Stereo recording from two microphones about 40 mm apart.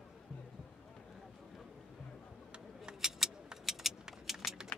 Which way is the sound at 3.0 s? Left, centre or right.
Centre.